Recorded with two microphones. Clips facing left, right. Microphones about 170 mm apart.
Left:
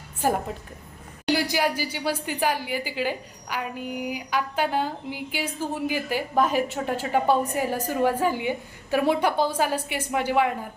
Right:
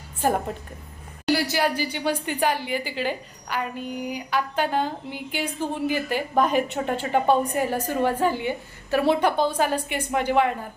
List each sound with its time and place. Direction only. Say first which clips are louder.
0.2 s a woman's voice: right 1 dB; 10° left (ahead or behind)